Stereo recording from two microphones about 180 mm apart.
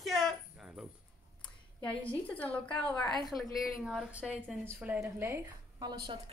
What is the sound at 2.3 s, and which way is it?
A woman's voice, 5° left (ahead or behind).